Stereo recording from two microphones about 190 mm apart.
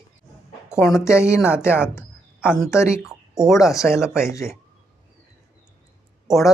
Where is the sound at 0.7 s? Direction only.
Centre (ahead or behind).